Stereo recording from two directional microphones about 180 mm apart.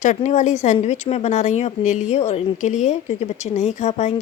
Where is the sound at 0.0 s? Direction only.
40° left (ahead or behind).